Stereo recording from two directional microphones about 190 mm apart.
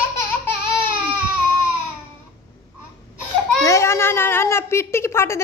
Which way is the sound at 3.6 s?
15° left (ahead or behind).